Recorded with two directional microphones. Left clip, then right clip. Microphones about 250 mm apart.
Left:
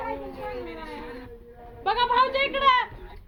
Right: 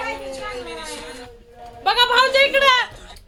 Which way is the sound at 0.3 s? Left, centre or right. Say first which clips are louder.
Right 5 dB; right.